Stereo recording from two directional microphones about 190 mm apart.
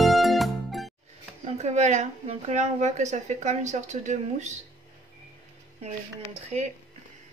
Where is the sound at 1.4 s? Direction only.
35° right (ahead or behind).